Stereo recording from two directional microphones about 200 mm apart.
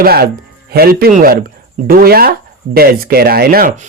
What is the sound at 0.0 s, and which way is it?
Speech, 50° right (ahead or behind).